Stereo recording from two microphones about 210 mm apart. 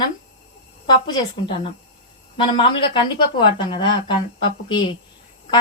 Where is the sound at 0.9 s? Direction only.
25° left (ahead or behind).